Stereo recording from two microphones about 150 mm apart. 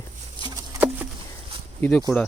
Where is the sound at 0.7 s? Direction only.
10° right (ahead or behind).